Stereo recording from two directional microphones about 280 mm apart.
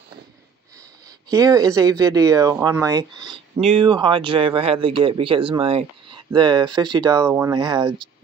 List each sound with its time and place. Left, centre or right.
1.3 s speech: centre